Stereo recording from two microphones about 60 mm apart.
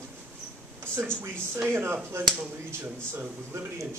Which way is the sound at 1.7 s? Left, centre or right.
Right.